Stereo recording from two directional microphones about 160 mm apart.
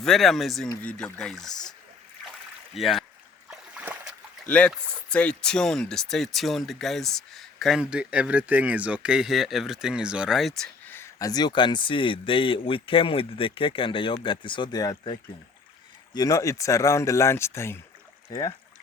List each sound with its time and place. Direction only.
0.0 s speech: centre (ahead or behind)
2.7 s speech: centre (ahead or behind)
3.5 s a sound: 5° right (ahead or behind)
4.4 s speech: 5° left (ahead or behind)
10.9 s speech: 20° left (ahead or behind)